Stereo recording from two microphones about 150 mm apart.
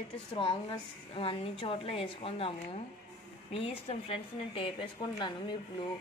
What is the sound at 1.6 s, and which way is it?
A woman's voice, 35° left (ahead or behind).